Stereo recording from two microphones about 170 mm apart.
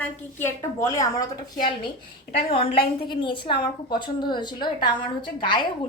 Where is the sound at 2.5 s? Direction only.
35° left (ahead or behind).